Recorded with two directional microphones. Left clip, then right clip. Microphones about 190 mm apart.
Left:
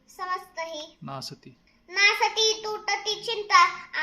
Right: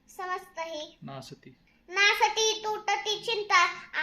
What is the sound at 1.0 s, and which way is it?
Speech, 25° left (ahead or behind).